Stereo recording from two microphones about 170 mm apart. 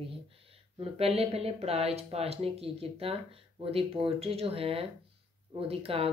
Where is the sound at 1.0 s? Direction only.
35° right (ahead or behind).